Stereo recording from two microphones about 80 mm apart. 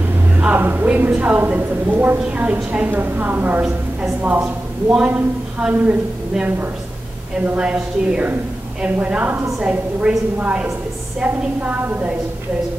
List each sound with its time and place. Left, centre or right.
0.4 s a woman's voice: right
4.9 s a woman's voice: centre